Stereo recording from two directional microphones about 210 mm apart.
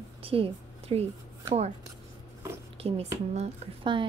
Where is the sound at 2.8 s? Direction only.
30° right (ahead or behind).